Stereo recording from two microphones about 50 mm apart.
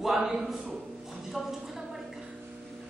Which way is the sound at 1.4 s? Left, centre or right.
Centre.